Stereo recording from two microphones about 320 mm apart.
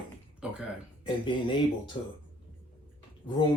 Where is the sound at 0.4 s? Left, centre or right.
Centre.